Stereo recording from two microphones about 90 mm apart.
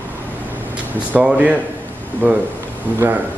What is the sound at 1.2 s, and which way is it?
Speech, 20° right (ahead or behind).